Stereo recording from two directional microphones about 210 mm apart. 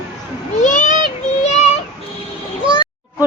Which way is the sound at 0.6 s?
35° left (ahead or behind).